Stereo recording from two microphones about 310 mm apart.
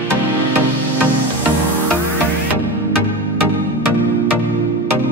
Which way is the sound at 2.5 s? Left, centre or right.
Right.